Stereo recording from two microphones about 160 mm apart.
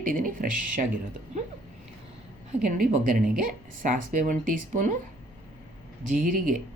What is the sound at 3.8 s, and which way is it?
Speech, 55° right (ahead or behind).